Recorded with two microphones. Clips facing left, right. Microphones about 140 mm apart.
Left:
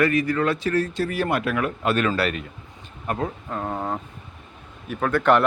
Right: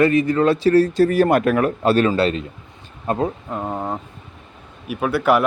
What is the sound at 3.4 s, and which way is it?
Speech, 15° right (ahead or behind).